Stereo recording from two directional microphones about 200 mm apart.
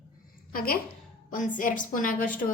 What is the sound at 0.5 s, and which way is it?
A woman's voice, 50° left (ahead or behind).